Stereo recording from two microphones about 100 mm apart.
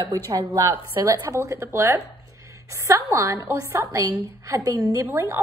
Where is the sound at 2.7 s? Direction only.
30° right (ahead or behind).